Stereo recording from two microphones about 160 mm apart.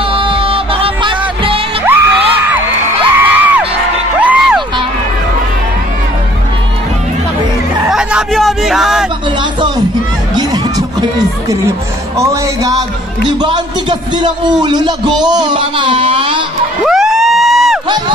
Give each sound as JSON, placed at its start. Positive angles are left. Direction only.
{"t": 0.0, "sound": "music", "side_deg": -35}
{"t": 1.9, "sound": "crowd", "side_deg": -15}
{"t": 4.2, "sound": "music", "side_deg": -5}
{"t": 7.9, "sound": "a sound", "side_deg": -5}
{"t": 10.3, "sound": "music", "side_deg": -25}
{"t": 12.2, "sound": "speech", "side_deg": -20}
{"t": 16.8, "sound": "crowd", "side_deg": 0}
{"t": 17.8, "sound": "crowd", "side_deg": -30}